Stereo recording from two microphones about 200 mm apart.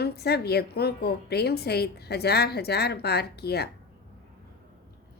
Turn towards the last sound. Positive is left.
turn(degrees=55)  # may be behind; listen again after turning